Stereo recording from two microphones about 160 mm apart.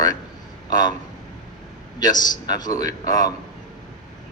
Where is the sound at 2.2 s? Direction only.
25° left (ahead or behind).